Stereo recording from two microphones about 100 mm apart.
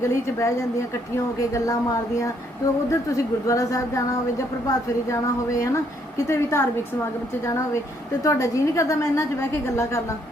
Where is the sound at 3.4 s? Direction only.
35° left (ahead or behind).